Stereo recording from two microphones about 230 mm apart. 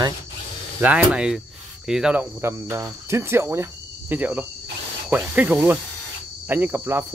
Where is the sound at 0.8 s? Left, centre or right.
Centre.